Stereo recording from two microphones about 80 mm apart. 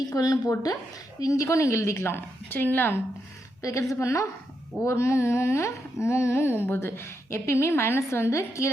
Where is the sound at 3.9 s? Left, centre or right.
Left.